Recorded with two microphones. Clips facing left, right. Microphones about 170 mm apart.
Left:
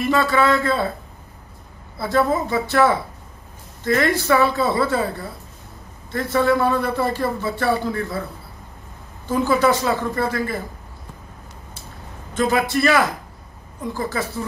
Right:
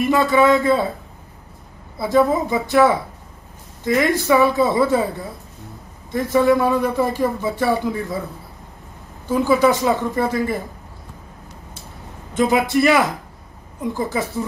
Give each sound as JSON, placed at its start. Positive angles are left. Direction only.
{"t": 0.0, "sound": "speech", "side_deg": -20}
{"t": 2.0, "sound": "speech", "side_deg": -15}
{"t": 9.4, "sound": "speech", "side_deg": -15}
{"t": 12.4, "sound": "a woman's voice", "side_deg": -20}